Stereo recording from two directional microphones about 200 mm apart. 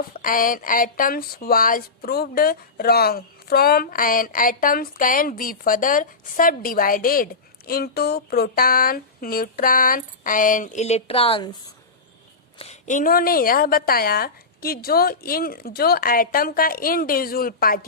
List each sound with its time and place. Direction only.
0.1 s speech: 45° left (ahead or behind); by 11.5 s 25° left (ahead or behind)
12.5 s speech: 35° left (ahead or behind)